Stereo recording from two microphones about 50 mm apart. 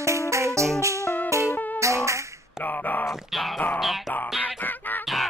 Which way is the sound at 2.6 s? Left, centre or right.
Left.